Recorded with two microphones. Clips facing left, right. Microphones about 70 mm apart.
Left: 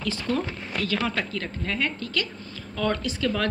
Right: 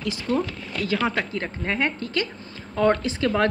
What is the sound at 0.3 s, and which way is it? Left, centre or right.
A woman's voice, right.